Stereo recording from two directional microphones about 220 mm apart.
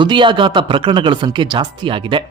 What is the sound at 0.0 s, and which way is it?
A man's voice, 20° right (ahead or behind).